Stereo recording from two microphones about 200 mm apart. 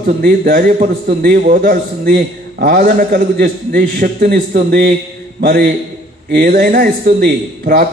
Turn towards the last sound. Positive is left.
turn(degrees=-50)  # may be behind; listen again after turning